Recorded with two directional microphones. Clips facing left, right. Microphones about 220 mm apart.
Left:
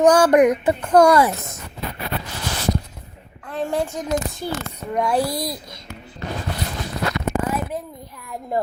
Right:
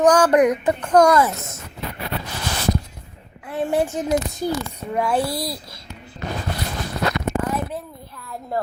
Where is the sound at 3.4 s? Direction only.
10° right (ahead or behind).